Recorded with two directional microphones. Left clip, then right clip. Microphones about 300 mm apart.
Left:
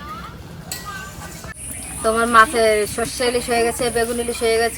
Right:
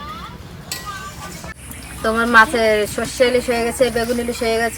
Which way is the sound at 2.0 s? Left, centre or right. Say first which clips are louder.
Right 1 dB; centre.